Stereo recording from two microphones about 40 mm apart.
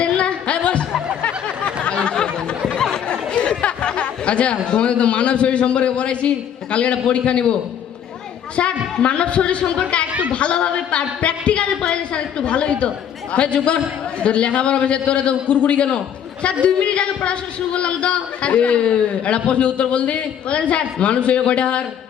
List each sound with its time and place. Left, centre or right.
0.0 s a sound: left
2.9 s speech: left
8.5 s a man's voice: left